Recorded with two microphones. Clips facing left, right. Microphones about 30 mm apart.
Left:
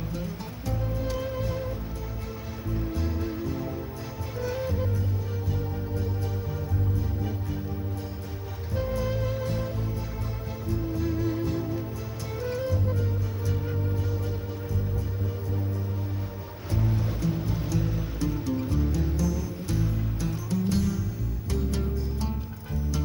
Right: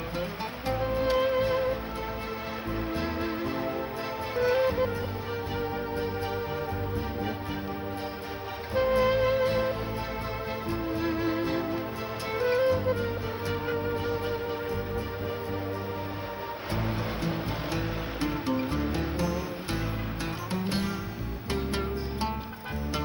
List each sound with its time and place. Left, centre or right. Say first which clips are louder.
0.7 s music: right 6 dB; right
2.7 s music: even; right
8.7 s music: right 6 dB; right
16.8 s music: left 4 dB; right